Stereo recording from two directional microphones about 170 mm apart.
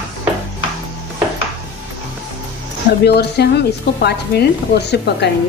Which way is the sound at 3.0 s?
75° left (ahead or behind).